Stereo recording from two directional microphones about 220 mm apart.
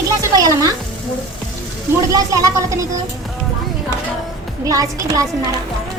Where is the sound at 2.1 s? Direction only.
15° right (ahead or behind).